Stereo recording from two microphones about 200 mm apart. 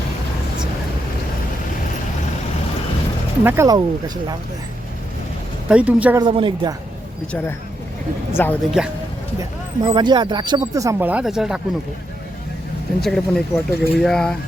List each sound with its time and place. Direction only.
3.4 s speech: 15° right (ahead or behind)
5.6 s speech: 5° right (ahead or behind)
6.1 s speech: 25° right (ahead or behind)
8.4 s speech: 10° left (ahead or behind)
8.8 s speech: 5° right (ahead or behind)
9.4 s speech: 20° right (ahead or behind); by 11.6 s centre (ahead or behind)
13.0 s speech: centre (ahead or behind)